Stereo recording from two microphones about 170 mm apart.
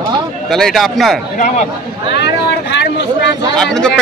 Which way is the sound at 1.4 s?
45° left (ahead or behind).